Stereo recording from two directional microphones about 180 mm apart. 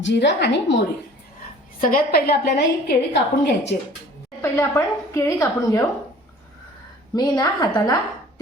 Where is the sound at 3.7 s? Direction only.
55° left (ahead or behind).